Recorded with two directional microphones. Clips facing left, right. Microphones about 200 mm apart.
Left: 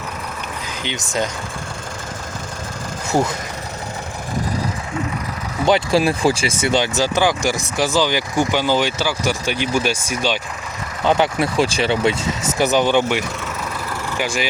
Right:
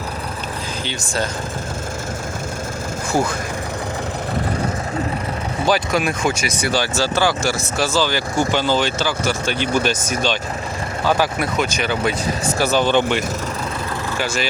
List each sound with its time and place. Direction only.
0.9 s speech: 20° left (ahead or behind)
3.1 s speech: 25° left (ahead or behind)
5.6 s speech: 25° left (ahead or behind)
11.0 s speech: 20° left (ahead or behind)